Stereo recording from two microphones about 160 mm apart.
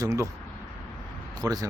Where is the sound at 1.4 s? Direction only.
25° right (ahead or behind).